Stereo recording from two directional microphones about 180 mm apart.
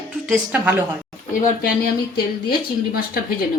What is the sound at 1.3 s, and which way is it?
Speech, 45° left (ahead or behind).